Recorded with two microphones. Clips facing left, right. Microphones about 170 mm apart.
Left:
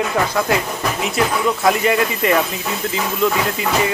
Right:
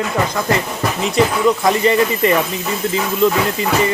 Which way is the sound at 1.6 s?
5° left (ahead or behind).